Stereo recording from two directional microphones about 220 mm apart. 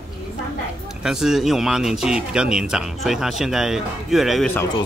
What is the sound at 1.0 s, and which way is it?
Speech, centre (ahead or behind).